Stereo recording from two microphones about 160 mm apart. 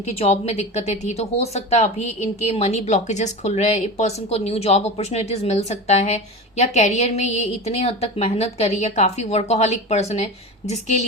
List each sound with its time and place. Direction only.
0.1 s a woman's voice: 40° left (ahead or behind)